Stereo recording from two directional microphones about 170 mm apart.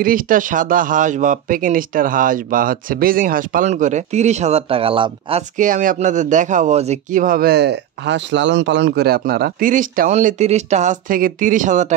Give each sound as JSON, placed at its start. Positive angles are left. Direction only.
{"t": 0.0, "sound": "speech", "side_deg": -55}
{"t": 5.6, "sound": "speech", "side_deg": -50}